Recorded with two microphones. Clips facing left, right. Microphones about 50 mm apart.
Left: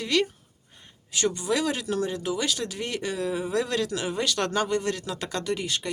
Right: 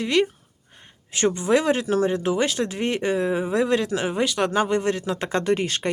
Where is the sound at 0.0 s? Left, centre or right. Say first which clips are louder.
Right 4 dB; right.